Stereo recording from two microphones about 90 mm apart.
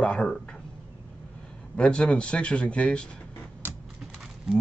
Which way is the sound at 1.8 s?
10° left (ahead or behind).